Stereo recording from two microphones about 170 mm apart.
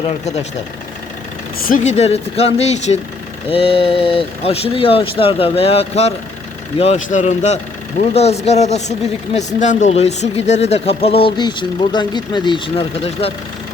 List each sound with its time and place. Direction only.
1.6 s a man's voice: 50° left (ahead or behind); by 12.8 s 30° left (ahead or behind)